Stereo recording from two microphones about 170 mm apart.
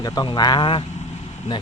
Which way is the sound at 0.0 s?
25° left (ahead or behind).